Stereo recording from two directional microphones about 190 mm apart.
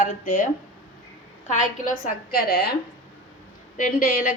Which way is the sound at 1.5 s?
40° left (ahead or behind).